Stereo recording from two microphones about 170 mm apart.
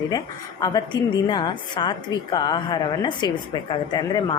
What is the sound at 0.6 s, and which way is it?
A woman's voice, 25° left (ahead or behind).